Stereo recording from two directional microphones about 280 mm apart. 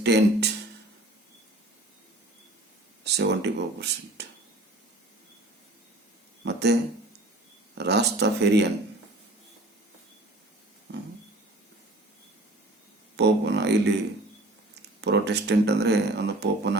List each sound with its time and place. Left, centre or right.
0.0 s speech: right
3.0 s speech: right
6.4 s a sound: right
7.8 s speech: right
10.9 s a sound: right
13.1 s music: right
14.8 s speech: right